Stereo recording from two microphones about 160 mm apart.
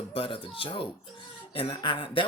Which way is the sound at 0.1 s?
35° left (ahead or behind).